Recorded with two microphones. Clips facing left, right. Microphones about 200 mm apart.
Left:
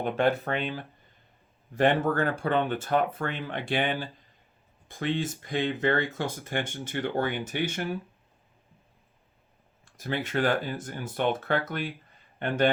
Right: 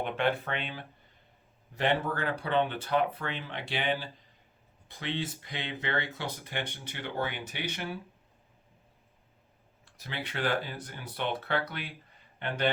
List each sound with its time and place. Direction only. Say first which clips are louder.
0.0 s speech: left 4 dB; 40° left (ahead or behind)
9.8 s speech: left 8 dB; 50° left (ahead or behind)